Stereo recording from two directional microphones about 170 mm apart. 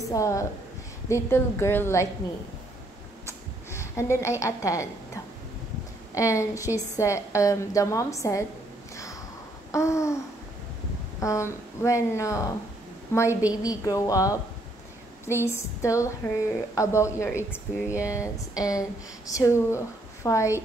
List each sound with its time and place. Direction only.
0.1 s a woman's voice: 20° left (ahead or behind)
3.3 s a sound: 15° left (ahead or behind)
6.1 s a woman's voice: 20° left (ahead or behind)
8.9 s a sound: 20° left (ahead or behind)
9.7 s a woman's voice: 20° left (ahead or behind)
11.1 s a woman's voice: 15° left (ahead or behind)
17.8 s speech: 10° right (ahead or behind)
18.1 s a woman's voice: 20° left (ahead or behind)